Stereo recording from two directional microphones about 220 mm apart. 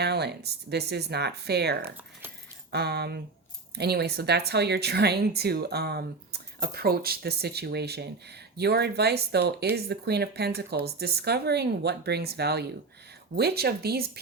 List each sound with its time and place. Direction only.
0.0 s speech: 50° right (ahead or behind)